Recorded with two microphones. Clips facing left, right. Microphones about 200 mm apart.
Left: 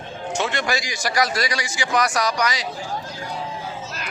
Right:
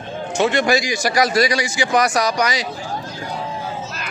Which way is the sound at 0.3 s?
15° right (ahead or behind).